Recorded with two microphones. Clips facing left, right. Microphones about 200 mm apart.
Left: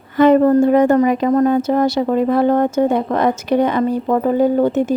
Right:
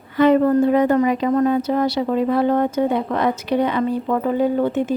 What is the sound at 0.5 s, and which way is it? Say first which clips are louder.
A woman's voice: left 4 dB; 45° left (ahead or behind).